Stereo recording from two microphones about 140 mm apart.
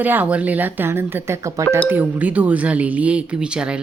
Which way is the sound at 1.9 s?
10° right (ahead or behind).